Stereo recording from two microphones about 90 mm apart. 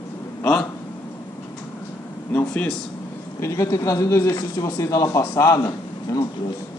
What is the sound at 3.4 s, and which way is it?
Speech, 35° left (ahead or behind).